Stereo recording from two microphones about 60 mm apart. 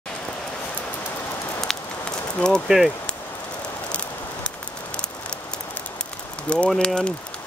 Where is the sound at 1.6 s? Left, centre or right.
Centre.